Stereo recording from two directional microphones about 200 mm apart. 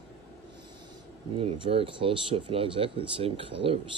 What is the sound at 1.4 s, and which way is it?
Speech, 30° right (ahead or behind).